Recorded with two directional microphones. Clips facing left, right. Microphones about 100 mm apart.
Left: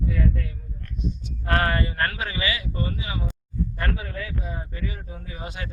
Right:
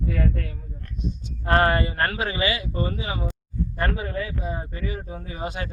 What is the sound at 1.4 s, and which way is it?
Speech, 30° right (ahead or behind).